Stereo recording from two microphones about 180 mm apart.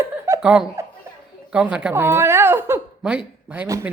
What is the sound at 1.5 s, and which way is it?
A woman's voice, 5° right (ahead or behind).